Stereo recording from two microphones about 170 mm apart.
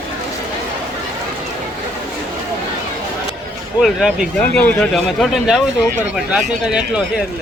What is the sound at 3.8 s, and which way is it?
Speech, centre (ahead or behind).